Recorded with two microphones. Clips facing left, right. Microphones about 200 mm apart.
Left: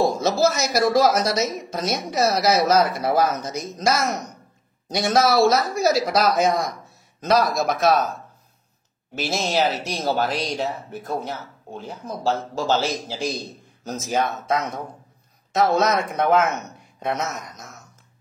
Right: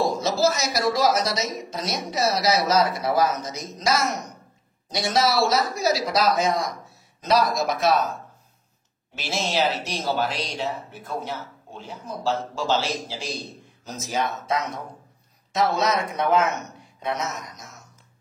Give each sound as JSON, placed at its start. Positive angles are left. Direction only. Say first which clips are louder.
{"t": 0.0, "sound": "speech", "louder": "left 2 dB", "side_deg": 55}
{"t": 9.1, "sound": "speech", "louder": "left 3 dB", "side_deg": 40}
{"t": 13.8, "sound": "speech", "louder": "left 4 dB", "side_deg": 50}